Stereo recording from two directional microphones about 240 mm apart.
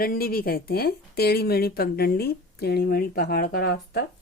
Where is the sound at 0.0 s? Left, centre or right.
Left.